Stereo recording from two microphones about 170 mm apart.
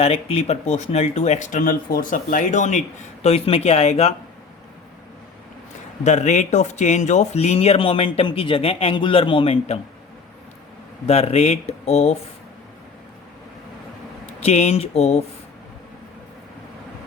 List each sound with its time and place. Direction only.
0.0 s speech: 35° left (ahead or behind)
6.0 s speech: 45° left (ahead or behind)
11.0 s speech: 40° left (ahead or behind)
14.4 s speech: 40° left (ahead or behind)